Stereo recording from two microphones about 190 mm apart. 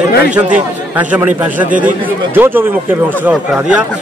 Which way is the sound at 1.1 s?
10° right (ahead or behind).